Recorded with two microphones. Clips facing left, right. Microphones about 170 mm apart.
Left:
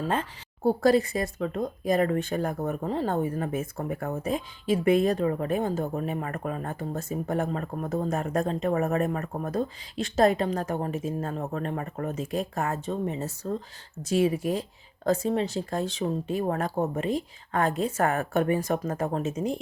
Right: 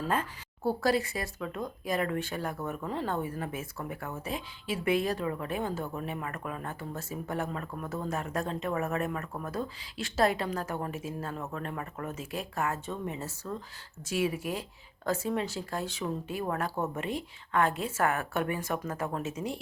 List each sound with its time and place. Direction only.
0.8 s a woman's voice: 40° left (ahead or behind)
13.4 s a woman's voice: 30° left (ahead or behind)